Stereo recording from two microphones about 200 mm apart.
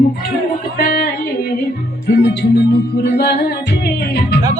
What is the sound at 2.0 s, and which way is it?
Music, 55° left (ahead or behind).